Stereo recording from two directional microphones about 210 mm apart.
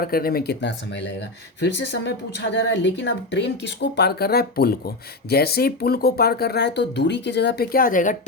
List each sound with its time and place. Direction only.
0.0 s a woman's voice: 45° left (ahead or behind)